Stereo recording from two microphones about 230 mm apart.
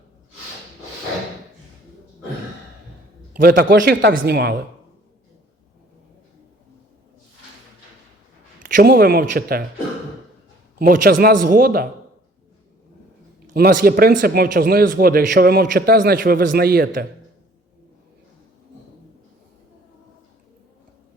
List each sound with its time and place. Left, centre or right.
3.3 s a man's voice: right
8.5 s speech: right
10.8 s a man's voice: right
13.5 s a man's voice: right